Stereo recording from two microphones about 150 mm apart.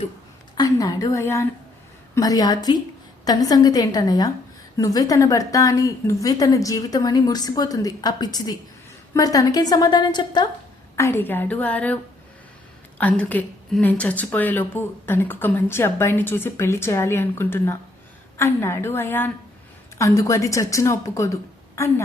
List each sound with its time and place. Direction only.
0.5 s a woman's voice: 25° left (ahead or behind)
10.9 s a woman's voice: 15° left (ahead or behind)
13.0 s a woman's voice: 10° left (ahead or behind)